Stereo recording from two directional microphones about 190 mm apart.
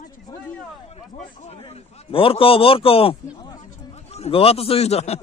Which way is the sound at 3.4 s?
20° left (ahead or behind).